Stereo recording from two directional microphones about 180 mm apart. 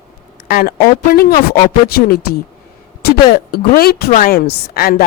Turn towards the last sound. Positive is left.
turn(degrees=55)  # may be behind; listen again after turning